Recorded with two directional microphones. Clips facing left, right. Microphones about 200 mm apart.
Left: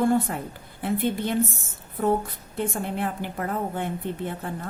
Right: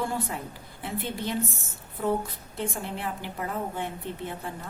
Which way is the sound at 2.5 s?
55° left (ahead or behind).